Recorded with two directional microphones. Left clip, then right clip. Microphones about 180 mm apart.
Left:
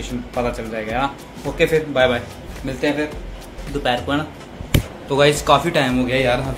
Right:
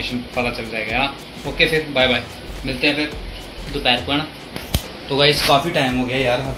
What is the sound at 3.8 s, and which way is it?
Speech, 15° left (ahead or behind).